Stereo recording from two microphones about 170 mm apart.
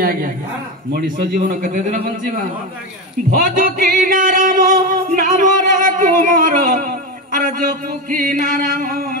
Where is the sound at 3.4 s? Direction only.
55° right (ahead or behind).